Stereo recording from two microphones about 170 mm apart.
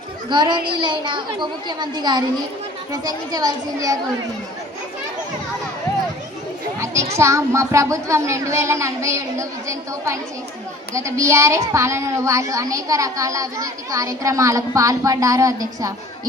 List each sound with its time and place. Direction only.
0.3 s a woman's voice: 25° right (ahead or behind)
6.7 s children playing: 15° right (ahead or behind)
7.2 s a woman's voice: 15° right (ahead or behind)